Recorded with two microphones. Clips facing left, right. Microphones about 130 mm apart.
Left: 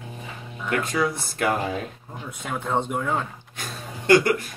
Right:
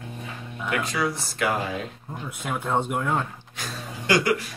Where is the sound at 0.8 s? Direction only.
55° left (ahead or behind).